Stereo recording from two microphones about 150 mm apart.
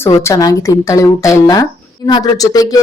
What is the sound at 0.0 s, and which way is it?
Speech, 20° left (ahead or behind).